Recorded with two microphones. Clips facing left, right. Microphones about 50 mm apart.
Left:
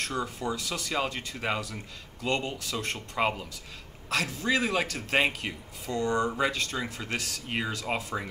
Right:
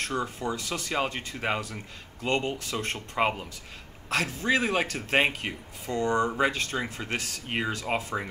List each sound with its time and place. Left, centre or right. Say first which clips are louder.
0.0 s a man's voice: right 1 dB; centre